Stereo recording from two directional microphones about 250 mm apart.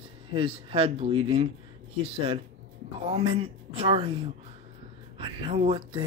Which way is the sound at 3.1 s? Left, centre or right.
Right.